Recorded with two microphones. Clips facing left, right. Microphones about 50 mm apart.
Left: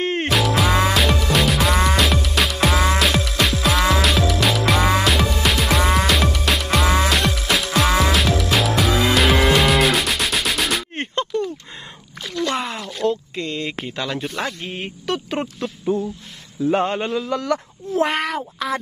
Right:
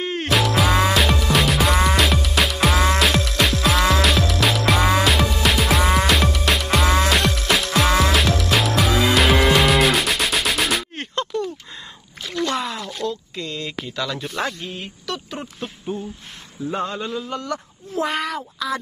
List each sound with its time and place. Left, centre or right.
0.0 s music: left
0.3 s music: centre
12.5 s a sound: left
13.0 s speech: left
15.2 s a man's voice: left
16.7 s a man's voice: left
17.9 s speech: left